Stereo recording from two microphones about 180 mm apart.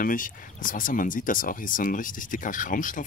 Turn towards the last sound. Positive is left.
turn(degrees=45)  # may be behind; listen again after turning